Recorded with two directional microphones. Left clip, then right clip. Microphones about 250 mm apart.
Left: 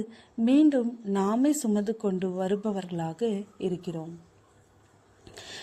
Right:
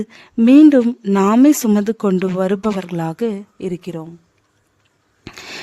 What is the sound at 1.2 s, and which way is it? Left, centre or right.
Speech, right.